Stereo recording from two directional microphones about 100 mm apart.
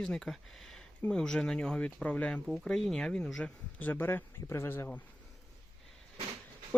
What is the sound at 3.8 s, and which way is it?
Speech, 20° left (ahead or behind).